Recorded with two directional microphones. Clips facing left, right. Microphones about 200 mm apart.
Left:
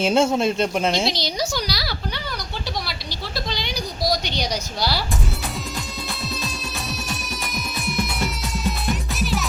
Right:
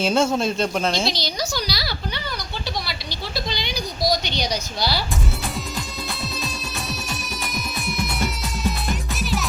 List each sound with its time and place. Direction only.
0.0 s a woman's voice: 15° left (ahead or behind)
3.1 s a sound: centre (ahead or behind)
4.3 s a woman's voice: 10° left (ahead or behind)
7.1 s music: centre (ahead or behind)